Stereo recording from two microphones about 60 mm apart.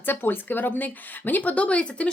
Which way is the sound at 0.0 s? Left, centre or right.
Left.